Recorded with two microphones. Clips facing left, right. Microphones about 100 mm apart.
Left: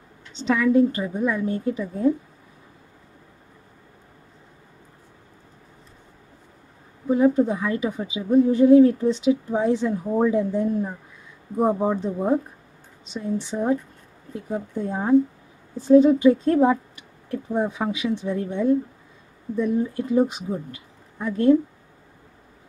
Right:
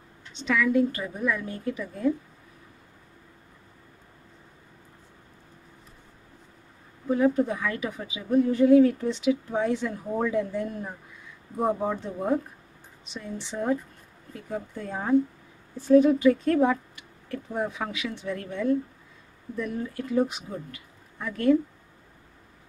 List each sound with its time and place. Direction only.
0.4 s a woman's voice: 30° left (ahead or behind)
7.1 s a woman's voice: 15° left (ahead or behind)